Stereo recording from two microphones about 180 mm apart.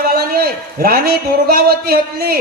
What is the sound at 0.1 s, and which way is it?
A man's voice, 55° right (ahead or behind).